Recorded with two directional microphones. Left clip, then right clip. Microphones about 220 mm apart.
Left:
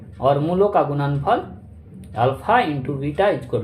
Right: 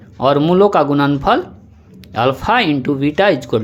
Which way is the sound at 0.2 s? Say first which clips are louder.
Right 6 dB; 45° right (ahead or behind).